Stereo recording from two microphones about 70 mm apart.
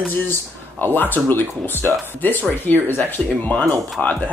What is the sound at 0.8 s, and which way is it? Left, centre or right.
Speech, left.